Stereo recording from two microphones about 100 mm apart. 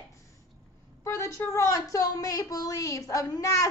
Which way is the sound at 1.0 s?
30° left (ahead or behind).